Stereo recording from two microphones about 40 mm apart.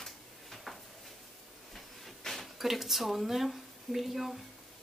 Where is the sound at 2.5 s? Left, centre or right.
Centre.